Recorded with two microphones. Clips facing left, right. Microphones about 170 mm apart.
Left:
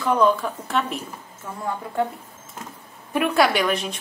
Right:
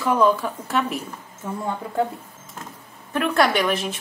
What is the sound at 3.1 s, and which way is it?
Speech, 10° left (ahead or behind).